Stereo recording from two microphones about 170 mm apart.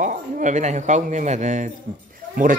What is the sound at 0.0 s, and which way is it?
Speech, 50° right (ahead or behind).